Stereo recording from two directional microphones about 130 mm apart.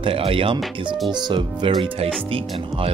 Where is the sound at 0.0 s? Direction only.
45° right (ahead or behind).